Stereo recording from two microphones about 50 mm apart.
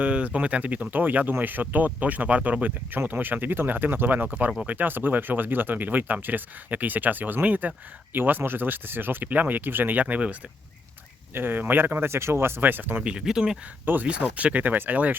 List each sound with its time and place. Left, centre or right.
0.0 s speech: right
8.1 s speech: right
11.3 s speech: right
12.6 s speech: right
13.0 s speech: right
13.8 s speech: right